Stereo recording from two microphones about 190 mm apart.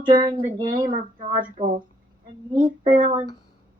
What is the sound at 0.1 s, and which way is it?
Speech, 25° right (ahead or behind).